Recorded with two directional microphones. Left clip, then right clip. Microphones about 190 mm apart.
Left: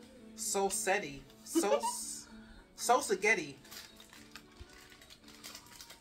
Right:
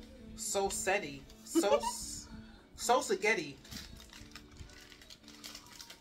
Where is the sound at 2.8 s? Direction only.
10° left (ahead or behind).